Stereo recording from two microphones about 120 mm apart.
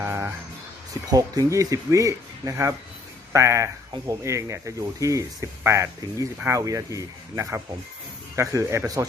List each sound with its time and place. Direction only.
0.0 s music: 20° right (ahead or behind)
1.1 s speech: 30° right (ahead or behind)